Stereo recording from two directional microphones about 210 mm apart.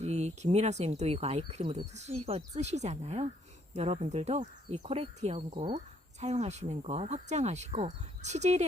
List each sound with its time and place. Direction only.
0.0 s speech: 30° right (ahead or behind)